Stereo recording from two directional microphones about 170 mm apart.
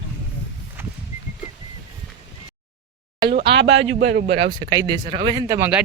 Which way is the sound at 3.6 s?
90° right.